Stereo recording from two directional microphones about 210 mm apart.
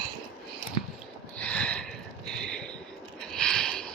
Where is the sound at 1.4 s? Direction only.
5° left (ahead or behind).